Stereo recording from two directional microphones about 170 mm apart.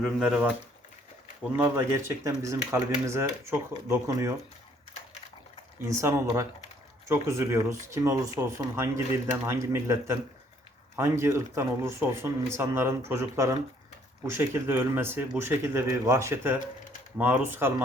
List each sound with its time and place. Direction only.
0.0 s speech: 5° right (ahead or behind)
1.5 s speech: 15° right (ahead or behind)
5.9 s speech: 15° right (ahead or behind)